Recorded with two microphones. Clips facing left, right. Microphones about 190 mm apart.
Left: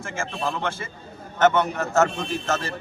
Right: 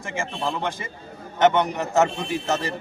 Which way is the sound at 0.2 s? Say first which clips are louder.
Right 1 dB; 15° right (ahead or behind).